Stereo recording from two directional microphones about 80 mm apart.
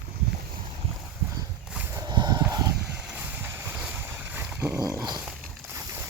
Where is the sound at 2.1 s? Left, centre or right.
Right.